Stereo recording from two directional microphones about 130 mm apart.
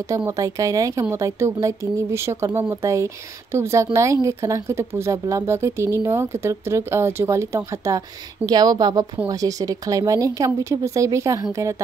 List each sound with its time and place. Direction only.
0.3 s a woman's voice: 25° right (ahead or behind)